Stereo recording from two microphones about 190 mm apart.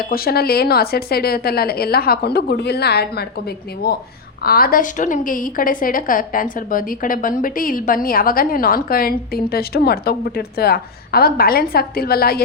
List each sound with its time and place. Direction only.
0.1 s a woman's voice: 55° left (ahead or behind)